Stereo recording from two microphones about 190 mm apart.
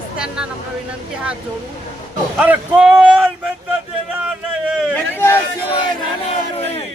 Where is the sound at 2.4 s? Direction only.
5° right (ahead or behind).